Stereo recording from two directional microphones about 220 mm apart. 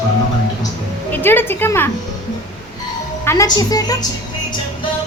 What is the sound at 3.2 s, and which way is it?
Speech, 15° left (ahead or behind).